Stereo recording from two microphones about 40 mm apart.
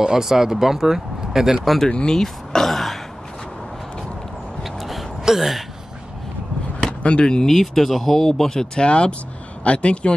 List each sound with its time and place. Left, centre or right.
0.0 s speech: centre
1.9 s speech: left
2.1 s throat clearing: centre
4.6 s a sound: centre
7.0 s speech: left
7.4 s speech: centre
8.3 s speech: centre
8.8 s speech: left